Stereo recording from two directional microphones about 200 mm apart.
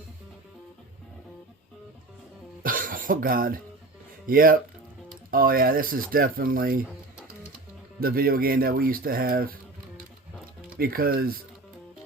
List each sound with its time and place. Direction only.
2.6 s speech: 45° right (ahead or behind)
8.0 s speech: 45° right (ahead or behind)
10.8 s speech: 50° right (ahead or behind)